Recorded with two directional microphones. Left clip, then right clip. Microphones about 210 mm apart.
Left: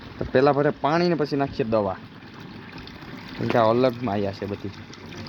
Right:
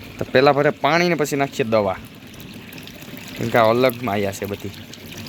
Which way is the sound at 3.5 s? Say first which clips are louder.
Right 4 dB; centre (ahead or behind).